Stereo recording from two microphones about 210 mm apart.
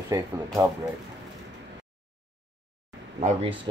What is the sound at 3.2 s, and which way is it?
Speech, 30° right (ahead or behind).